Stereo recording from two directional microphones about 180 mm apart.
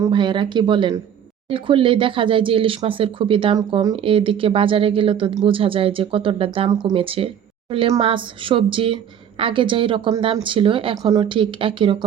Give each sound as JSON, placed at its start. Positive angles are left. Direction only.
{"t": 0.0, "sound": "speech", "side_deg": -25}